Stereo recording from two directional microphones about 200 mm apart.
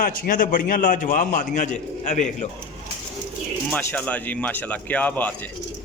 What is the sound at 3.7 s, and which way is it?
A man's voice, 10° left (ahead or behind).